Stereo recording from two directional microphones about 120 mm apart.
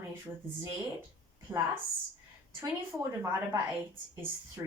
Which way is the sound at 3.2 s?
25° right (ahead or behind).